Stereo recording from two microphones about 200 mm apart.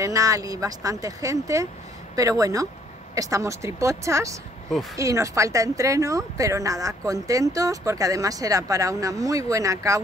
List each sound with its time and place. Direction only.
0.0 s speech: 15° right (ahead or behind)